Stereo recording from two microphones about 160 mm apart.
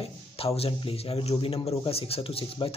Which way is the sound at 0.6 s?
35° left (ahead or behind).